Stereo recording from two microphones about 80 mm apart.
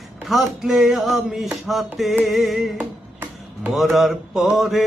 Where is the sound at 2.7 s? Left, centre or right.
Centre.